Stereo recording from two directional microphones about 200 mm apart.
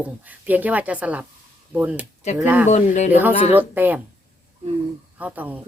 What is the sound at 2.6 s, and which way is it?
Speech, 35° left (ahead or behind).